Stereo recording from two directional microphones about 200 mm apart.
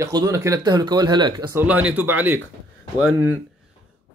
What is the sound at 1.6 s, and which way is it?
Speech, 5° right (ahead or behind).